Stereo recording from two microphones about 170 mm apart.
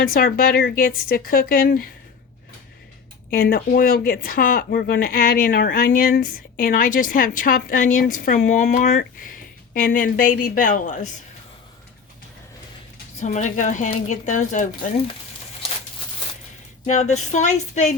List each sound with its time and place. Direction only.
0.1 s speech: 60° left (ahead or behind)
3.2 s speech: 60° left (ahead or behind)
13.2 s speech: 45° left (ahead or behind)
16.8 s speech: 40° left (ahead or behind)